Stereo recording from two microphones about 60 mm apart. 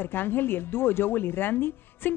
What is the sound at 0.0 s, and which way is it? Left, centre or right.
A woman's voice, left.